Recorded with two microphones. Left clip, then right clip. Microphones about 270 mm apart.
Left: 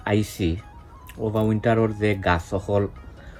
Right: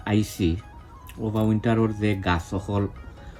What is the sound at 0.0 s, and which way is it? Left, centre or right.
Speech, centre.